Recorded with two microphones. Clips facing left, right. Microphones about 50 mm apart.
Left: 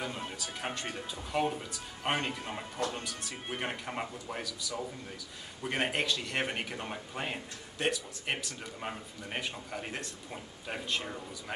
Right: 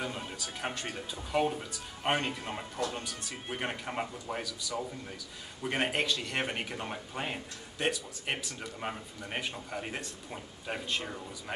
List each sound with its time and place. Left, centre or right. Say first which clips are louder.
0.2 s speech: even; centre